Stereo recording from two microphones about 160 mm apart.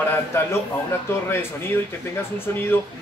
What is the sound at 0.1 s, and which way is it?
Speech, 15° left (ahead or behind).